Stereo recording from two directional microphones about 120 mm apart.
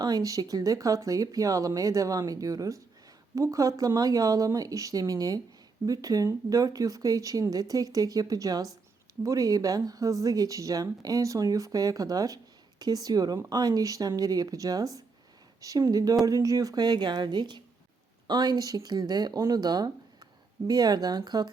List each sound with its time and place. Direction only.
0.0 s speech: 30° right (ahead or behind)